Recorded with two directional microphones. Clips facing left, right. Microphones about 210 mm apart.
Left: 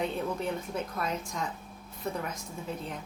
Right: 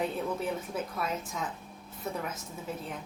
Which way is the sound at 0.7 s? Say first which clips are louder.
Left 1 dB; 5° right (ahead or behind).